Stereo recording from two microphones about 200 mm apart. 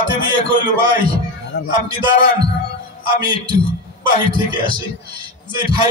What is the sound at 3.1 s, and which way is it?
Speech, 20° right (ahead or behind).